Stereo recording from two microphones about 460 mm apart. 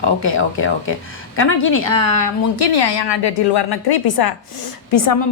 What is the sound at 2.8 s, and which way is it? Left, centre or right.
A woman's voice, left.